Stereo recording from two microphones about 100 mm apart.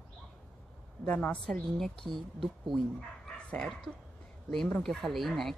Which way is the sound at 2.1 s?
50° right (ahead or behind).